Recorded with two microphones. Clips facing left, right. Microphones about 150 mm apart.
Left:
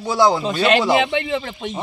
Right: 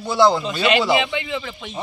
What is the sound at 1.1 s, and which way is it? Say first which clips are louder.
Speech: left 4 dB; 50° left (ahead or behind).